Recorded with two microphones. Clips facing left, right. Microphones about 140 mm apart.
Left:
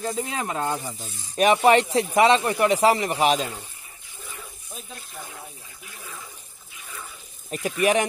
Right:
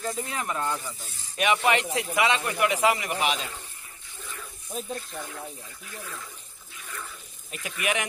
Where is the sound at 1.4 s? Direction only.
35° left (ahead or behind).